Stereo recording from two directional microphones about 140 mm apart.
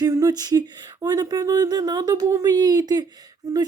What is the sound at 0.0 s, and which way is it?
Speech, 25° right (ahead or behind).